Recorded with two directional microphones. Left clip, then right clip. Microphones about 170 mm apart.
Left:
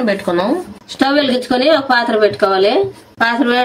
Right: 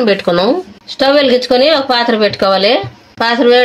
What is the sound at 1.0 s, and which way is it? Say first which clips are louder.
Speech: right 5 dB; 55° right (ahead or behind).